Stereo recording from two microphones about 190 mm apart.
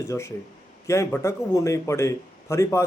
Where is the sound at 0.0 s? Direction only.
15° left (ahead or behind).